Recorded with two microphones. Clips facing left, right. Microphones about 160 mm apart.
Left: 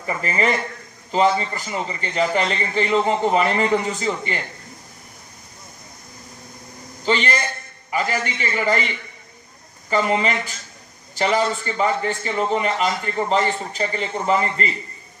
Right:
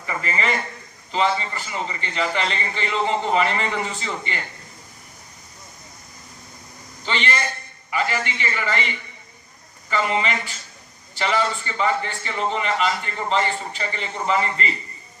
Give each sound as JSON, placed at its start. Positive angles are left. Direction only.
{"t": 0.0, "sound": "a man's voice", "side_deg": 40}
{"t": 7.0, "sound": "a man's voice", "side_deg": 40}
{"t": 9.9, "sound": "a man's voice", "side_deg": 40}